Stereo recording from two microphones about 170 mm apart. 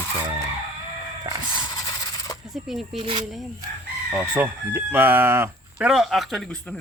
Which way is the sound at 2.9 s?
35° right (ahead or behind).